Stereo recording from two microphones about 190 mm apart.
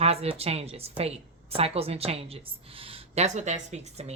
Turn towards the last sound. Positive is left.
turn(degrees=-35)  # may be behind; listen again after turning